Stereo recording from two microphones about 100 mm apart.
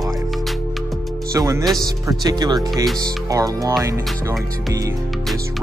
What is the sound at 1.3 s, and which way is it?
Speech, 35° right (ahead or behind).